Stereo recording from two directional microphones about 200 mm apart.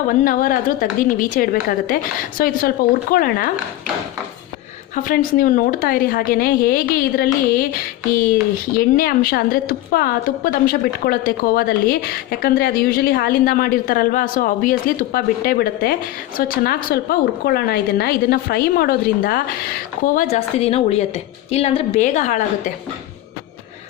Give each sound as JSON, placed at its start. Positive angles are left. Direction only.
{"t": 0.3, "sound": "a woman's voice", "side_deg": 45}
{"t": 4.9, "sound": "a woman's voice", "side_deg": 45}
{"t": 20.3, "sound": "a woman's voice", "side_deg": 30}